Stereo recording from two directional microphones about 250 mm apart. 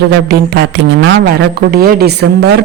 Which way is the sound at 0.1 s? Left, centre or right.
Right.